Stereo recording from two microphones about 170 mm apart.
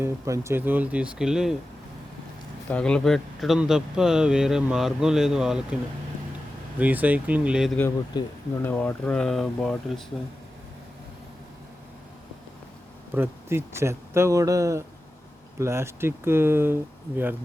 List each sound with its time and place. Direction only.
0.0 s speech: 15° right (ahead or behind)
2.6 s speech: 5° left (ahead or behind)
8.1 s speech: 25° left (ahead or behind)
8.6 s speech: 10° left (ahead or behind)
13.1 s speech: 15° right (ahead or behind)